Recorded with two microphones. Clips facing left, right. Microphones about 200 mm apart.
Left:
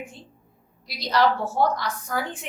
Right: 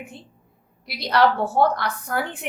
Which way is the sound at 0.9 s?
60° right (ahead or behind).